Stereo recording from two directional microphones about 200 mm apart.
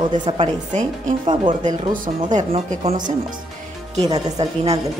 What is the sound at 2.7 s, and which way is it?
Speech, 35° right (ahead or behind).